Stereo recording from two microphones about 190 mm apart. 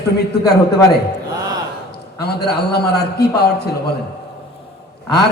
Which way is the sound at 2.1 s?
55° left (ahead or behind).